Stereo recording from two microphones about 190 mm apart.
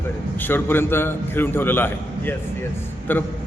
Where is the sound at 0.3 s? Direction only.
10° left (ahead or behind).